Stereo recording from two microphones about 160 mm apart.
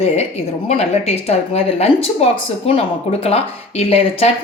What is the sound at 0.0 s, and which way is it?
A woman's voice, 40° left (ahead or behind).